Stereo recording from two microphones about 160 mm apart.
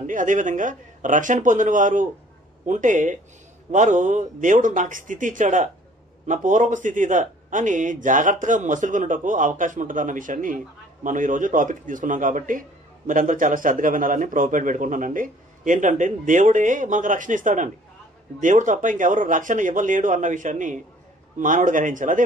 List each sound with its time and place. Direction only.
0.0 s a man's voice: 55° right (ahead or behind)